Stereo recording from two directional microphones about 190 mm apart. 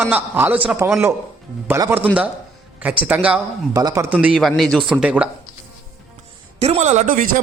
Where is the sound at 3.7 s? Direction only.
20° right (ahead or behind).